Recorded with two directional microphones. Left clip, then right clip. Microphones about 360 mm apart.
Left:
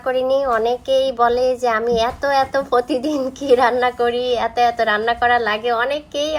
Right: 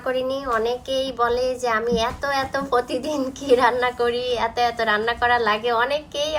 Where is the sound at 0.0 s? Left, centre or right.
Centre.